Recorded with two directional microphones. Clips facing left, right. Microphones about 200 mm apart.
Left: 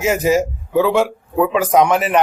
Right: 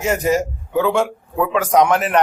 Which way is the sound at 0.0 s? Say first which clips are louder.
Left 2 dB; 5° left (ahead or behind).